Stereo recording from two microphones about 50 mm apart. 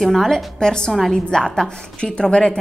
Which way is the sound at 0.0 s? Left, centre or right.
Centre.